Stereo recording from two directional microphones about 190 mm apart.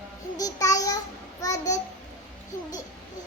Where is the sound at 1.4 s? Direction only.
20° left (ahead or behind).